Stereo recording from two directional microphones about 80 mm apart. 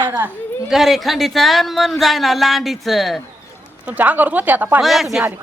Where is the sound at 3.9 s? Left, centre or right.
Right.